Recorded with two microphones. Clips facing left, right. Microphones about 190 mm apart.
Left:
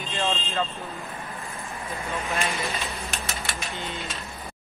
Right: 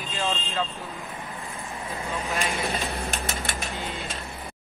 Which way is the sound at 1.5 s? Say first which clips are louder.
Right 1 dB; 20° right (ahead or behind).